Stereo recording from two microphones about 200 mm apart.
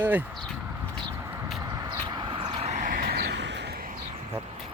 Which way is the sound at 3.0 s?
55° right (ahead or behind).